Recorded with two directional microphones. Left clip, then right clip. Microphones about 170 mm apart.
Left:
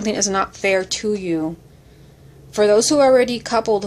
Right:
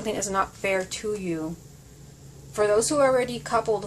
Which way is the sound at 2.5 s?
45° left (ahead or behind).